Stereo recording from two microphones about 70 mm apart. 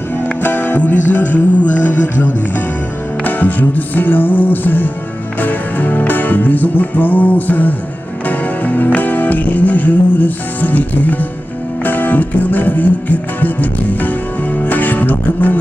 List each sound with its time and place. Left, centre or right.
0.4 s music: left